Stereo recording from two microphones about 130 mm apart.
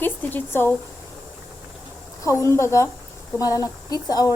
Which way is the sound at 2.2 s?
20° left (ahead or behind).